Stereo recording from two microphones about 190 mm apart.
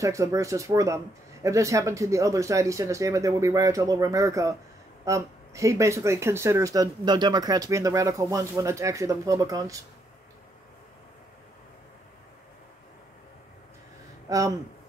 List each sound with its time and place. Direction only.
0.0 s speech: 15° right (ahead or behind)
14.3 s speech: 15° right (ahead or behind)